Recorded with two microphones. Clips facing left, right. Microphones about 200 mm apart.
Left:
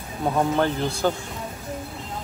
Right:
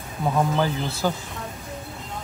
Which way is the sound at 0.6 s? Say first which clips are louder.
Left 2 dB; 5° right (ahead or behind).